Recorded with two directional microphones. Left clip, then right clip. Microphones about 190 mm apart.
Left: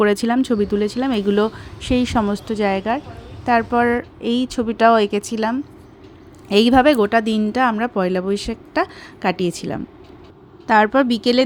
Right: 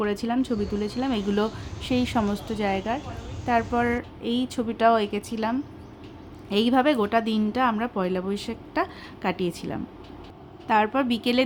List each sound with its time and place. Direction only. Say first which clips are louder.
0.0 s speech: left 9 dB; 45° left (ahead or behind)